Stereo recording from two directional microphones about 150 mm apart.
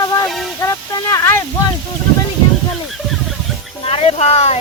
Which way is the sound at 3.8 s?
40° left (ahead or behind).